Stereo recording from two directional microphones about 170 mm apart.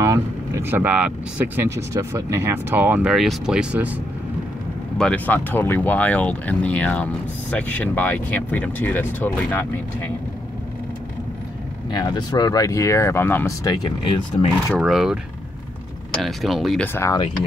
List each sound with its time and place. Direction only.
0.0 s speech: 15° right (ahead or behind)
4.9 s speech: 5° left (ahead or behind)
11.9 s speech: 25° left (ahead or behind)
13.7 s speech: 30° left (ahead or behind)
14.8 s speech: 5° right (ahead or behind)
16.2 s speech: centre (ahead or behind)
16.8 s speech: 15° left (ahead or behind)